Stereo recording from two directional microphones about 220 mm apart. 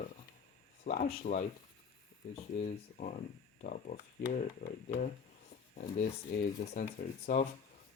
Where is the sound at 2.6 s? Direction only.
35° left (ahead or behind).